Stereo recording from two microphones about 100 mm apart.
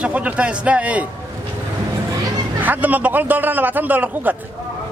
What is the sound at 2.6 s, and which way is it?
Speech, 15° right (ahead or behind).